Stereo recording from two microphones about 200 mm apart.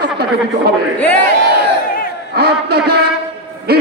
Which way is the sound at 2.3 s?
50° right (ahead or behind).